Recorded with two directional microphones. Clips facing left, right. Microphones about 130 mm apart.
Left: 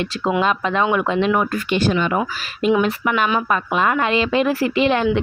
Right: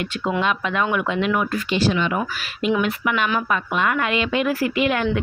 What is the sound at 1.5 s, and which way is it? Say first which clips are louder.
A woman's voice: left 2 dB; 50° left (ahead or behind).